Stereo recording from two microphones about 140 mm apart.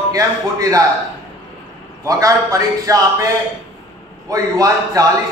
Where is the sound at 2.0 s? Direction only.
25° right (ahead or behind).